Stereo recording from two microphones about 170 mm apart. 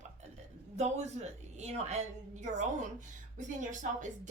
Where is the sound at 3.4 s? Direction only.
45° right (ahead or behind).